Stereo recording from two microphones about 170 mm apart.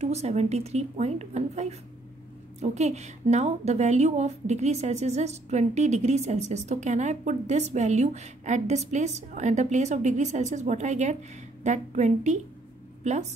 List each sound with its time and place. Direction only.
0.0 s a woman's voice: 40° right (ahead or behind)